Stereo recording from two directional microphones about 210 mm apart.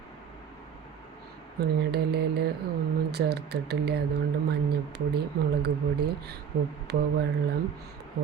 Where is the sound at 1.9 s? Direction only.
50° right (ahead or behind).